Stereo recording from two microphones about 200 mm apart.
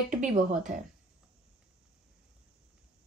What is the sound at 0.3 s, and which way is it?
Speech, 40° right (ahead or behind).